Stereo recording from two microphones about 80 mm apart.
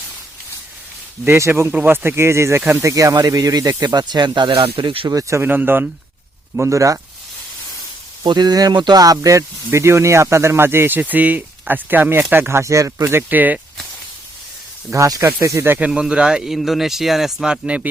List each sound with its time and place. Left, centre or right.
1.3 s speech: right
2.8 s speech: right
5.0 s speech: right
5.4 s speech: right
6.6 s speech: right
8.2 s speech: right
9.7 s speech: right
13.1 s speech: right
14.9 s speech: right
15.4 s speech: right
15.8 s speech: centre